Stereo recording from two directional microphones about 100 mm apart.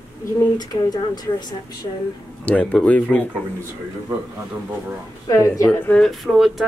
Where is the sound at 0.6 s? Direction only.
40° left (ahead or behind).